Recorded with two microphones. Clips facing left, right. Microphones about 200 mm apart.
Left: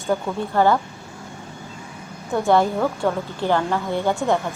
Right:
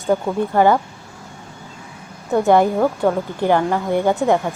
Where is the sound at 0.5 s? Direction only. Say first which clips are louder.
Right 3 dB; 15° right (ahead or behind).